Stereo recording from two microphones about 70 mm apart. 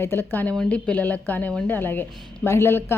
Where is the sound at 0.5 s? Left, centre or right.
Centre.